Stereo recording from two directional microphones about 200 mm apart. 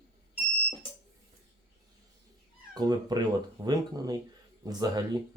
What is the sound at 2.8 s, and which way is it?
Speech, 20° right (ahead or behind).